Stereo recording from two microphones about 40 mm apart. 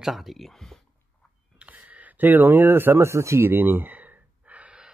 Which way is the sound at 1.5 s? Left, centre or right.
Right.